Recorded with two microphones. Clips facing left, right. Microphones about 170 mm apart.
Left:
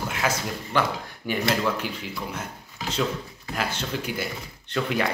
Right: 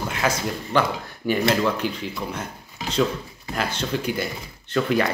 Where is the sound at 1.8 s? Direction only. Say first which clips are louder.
Right 6 dB; 10° left (ahead or behind).